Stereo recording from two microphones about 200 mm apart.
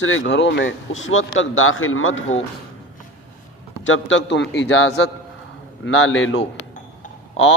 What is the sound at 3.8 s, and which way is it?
A man's voice, 70° left (ahead or behind).